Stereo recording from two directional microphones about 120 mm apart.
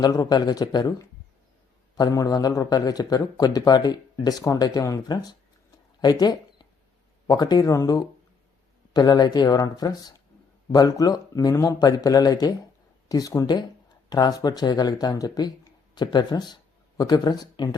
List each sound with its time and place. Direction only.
0.0 s speech: 30° left (ahead or behind)